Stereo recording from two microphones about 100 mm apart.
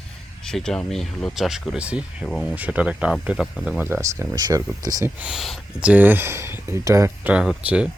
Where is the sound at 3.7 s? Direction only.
20° right (ahead or behind).